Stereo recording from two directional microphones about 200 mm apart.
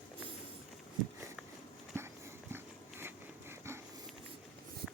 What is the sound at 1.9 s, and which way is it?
Dog, 10° right (ahead or behind).